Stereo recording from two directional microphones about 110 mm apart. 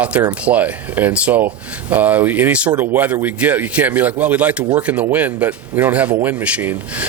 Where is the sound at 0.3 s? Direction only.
15° right (ahead or behind).